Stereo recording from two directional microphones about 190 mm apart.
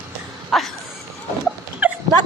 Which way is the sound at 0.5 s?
Centre (ahead or behind).